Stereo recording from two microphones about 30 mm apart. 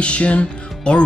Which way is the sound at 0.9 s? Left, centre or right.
Left.